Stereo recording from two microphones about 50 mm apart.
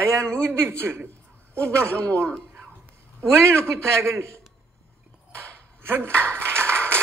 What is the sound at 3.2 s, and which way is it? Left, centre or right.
A man's voice, right.